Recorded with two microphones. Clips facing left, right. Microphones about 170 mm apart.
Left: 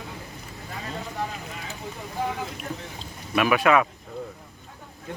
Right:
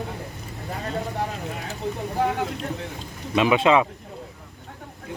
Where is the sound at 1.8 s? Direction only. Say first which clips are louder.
Right 6 dB; 70° right (ahead or behind).